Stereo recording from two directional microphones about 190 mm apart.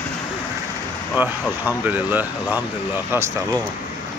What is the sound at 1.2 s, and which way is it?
Speech, 10° right (ahead or behind).